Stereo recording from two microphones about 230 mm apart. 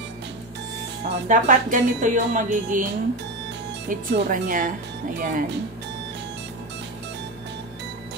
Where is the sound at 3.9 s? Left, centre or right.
Right.